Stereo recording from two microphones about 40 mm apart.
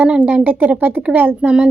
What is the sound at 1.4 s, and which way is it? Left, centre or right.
Speech, right.